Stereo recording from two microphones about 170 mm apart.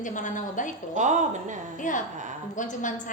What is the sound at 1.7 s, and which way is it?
A woman's voice, 50° left (ahead or behind).